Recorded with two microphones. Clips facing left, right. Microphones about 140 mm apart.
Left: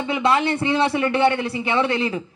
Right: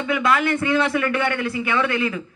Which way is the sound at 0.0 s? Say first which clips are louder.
Left 1 dB; 25° left (ahead or behind).